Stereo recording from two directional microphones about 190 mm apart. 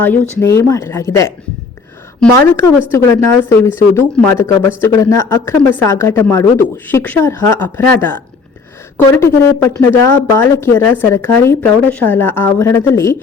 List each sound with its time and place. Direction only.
0.0 s speech: 10° left (ahead or behind)